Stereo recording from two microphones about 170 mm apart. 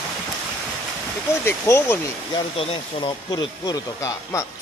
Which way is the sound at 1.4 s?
15° left (ahead or behind).